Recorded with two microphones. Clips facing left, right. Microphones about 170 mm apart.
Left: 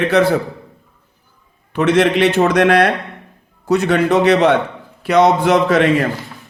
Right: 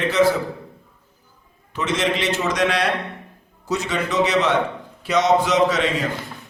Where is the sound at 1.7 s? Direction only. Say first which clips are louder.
Left 9 dB; 60° left (ahead or behind).